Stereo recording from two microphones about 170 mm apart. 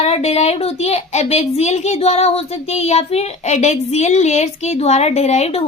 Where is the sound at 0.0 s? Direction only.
40° left (ahead or behind).